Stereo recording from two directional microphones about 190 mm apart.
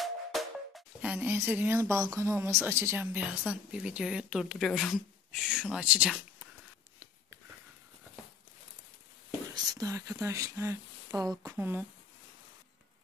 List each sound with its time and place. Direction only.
0.0 s music: centre (ahead or behind)
2.1 s speech: 15° right (ahead or behind)
9.8 s speech: 15° right (ahead or behind)